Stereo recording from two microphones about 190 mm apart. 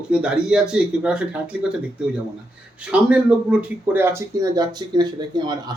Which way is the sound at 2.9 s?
5° right (ahead or behind).